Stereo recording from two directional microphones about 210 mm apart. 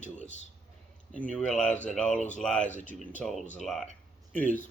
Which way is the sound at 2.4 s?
5° left (ahead or behind).